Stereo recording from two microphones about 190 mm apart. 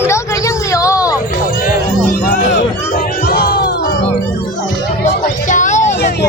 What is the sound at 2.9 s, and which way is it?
Crowd, 50° left (ahead or behind).